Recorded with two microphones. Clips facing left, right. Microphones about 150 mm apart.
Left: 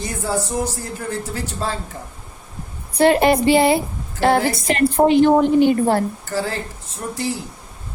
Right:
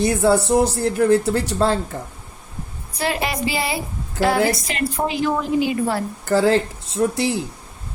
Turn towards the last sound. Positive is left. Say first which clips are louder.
# right 6 dB
turn(degrees=-75)  # may be behind; listen again after turning